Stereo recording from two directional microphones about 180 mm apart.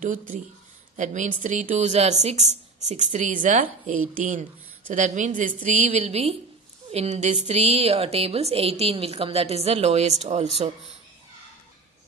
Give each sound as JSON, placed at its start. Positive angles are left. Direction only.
{"t": 0.9, "sound": "a woman's voice", "side_deg": -40}